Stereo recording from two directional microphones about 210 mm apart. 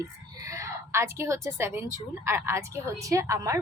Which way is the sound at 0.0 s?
15° right (ahead or behind).